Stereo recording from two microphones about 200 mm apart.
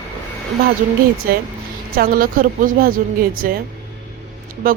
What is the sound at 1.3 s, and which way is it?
A woman's voice, 45° right (ahead or behind).